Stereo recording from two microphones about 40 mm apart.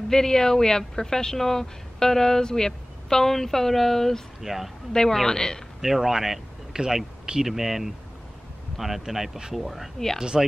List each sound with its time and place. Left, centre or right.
0.1 s speech: centre
4.4 s speech: centre
4.9 s speech: centre
5.8 s speech: centre